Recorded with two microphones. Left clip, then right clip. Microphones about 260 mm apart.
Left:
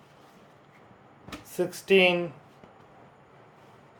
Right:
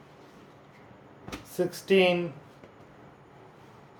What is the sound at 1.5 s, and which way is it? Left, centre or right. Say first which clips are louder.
Speech: left 2 dB; centre.